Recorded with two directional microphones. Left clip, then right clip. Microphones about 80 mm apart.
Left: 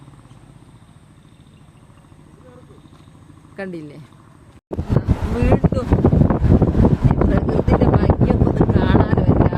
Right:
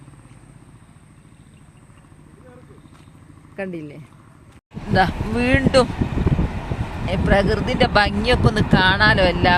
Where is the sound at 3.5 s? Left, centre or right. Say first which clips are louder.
Right 1 dB; right.